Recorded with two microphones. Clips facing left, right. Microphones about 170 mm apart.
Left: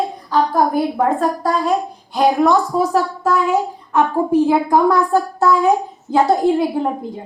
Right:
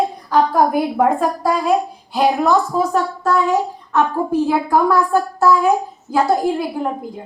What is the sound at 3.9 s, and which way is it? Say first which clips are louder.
A woman's voice: left 2 dB; 15° left (ahead or behind).